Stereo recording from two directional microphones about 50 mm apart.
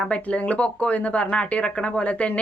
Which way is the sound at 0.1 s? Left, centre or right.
Left.